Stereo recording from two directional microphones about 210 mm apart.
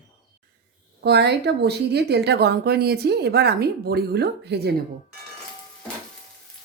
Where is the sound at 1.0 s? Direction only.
55° right (ahead or behind).